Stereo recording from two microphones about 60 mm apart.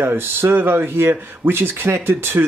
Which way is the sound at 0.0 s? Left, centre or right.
Right.